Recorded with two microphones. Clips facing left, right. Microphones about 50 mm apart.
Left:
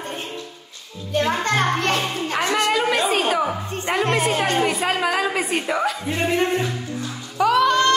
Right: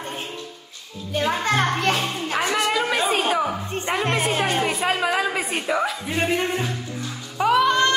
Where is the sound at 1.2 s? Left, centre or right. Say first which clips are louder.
Left 1 dB; centre.